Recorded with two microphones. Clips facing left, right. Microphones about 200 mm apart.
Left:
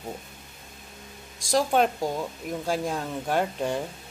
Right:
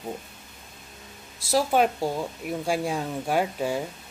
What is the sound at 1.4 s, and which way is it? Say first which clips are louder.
Speech: right 1 dB; 5° right (ahead or behind).